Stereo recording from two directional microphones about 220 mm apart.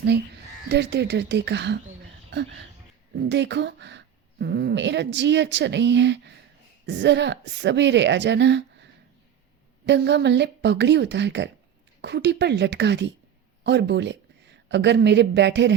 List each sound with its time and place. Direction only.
0.7 s speech: 50° right (ahead or behind)
3.2 s speech: 50° right (ahead or behind)